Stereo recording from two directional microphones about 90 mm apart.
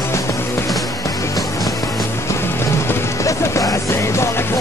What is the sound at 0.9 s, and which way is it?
Music, 40° left (ahead or behind).